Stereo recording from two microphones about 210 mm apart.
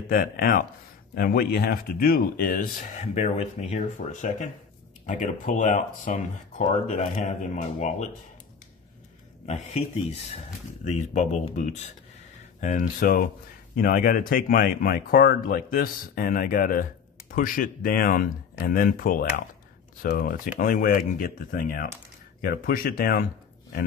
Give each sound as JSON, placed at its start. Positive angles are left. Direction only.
{"t": 0.1, "sound": "speech", "side_deg": 45}
{"t": 9.5, "sound": "speech", "side_deg": 30}